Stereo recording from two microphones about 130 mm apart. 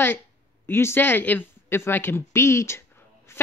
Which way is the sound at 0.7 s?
20° left (ahead or behind).